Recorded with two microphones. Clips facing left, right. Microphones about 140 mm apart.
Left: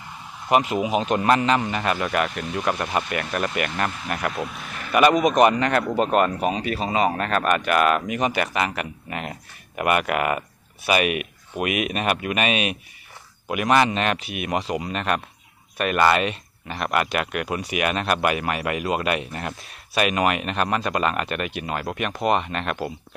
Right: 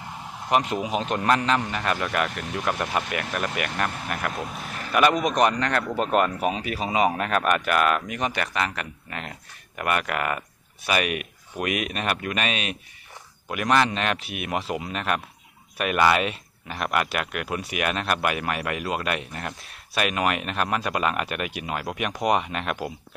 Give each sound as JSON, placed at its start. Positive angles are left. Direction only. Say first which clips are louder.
{"t": 0.5, "sound": "speech", "louder": "left 3 dB", "side_deg": 5}
{"t": 4.3, "sound": "a sound", "louder": "left 2 dB", "side_deg": -40}
{"t": 4.9, "sound": "speech", "louder": "left 4 dB", "side_deg": 5}